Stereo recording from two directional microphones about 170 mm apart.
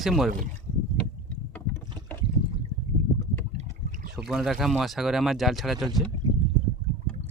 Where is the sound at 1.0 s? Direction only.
10° left (ahead or behind).